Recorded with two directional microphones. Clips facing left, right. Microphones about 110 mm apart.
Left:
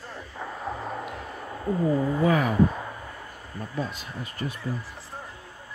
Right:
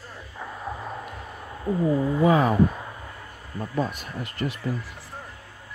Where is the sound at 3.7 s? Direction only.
50° right (ahead or behind); by 4.5 s 70° right (ahead or behind).